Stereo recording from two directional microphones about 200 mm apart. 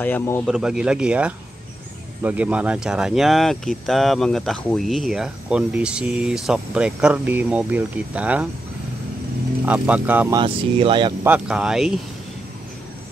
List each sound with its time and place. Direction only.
0.0 s speech: 10° left (ahead or behind)
0.6 s speech: 5° right (ahead or behind)
9.7 s speech: 5° right (ahead or behind)
10.3 s speech: 25° right (ahead or behind)
11.2 s speech: 5° right (ahead or behind)